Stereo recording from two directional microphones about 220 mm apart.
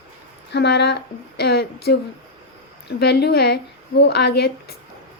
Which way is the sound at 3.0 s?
50° left (ahead or behind).